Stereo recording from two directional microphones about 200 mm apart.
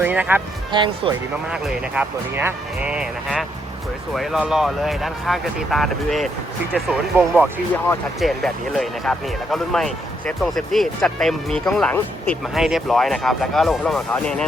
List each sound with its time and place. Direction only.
0.0 s speech: 10° right (ahead or behind)
0.7 s speech: 25° right (ahead or behind)
1.5 s speech: 5° right (ahead or behind)